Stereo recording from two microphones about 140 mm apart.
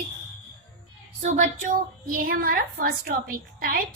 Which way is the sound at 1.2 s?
65° right (ahead or behind).